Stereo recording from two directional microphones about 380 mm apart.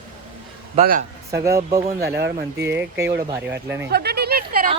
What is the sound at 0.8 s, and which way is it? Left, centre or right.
Speech, right.